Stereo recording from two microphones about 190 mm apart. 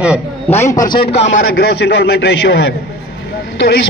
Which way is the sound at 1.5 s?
60° left (ahead or behind).